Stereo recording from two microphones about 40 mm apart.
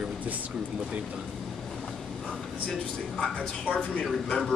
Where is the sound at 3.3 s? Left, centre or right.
Left.